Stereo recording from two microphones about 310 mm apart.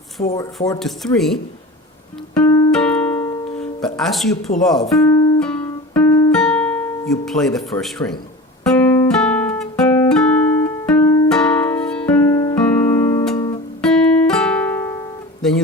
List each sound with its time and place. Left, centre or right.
0.3 s speech: centre
0.8 s speech: centre
2.3 s music: centre
4.5 s speech: left
5.1 s music: centre
13.8 s guitar: centre